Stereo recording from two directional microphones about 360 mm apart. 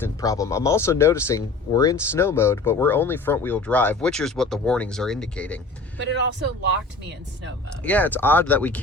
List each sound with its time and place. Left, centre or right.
0.0 s speech: centre
6.0 s speech: right
7.9 s speech: centre